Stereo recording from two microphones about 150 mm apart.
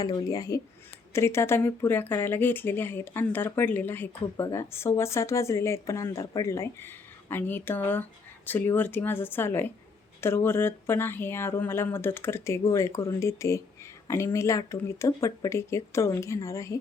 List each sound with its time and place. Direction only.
0.0 s speech: 25° left (ahead or behind)